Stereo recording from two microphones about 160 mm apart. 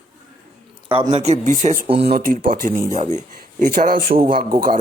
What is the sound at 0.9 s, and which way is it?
A man's voice, 30° right (ahead or behind).